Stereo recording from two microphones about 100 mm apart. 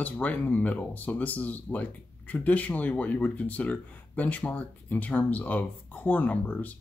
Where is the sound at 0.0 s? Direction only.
15° left (ahead or behind).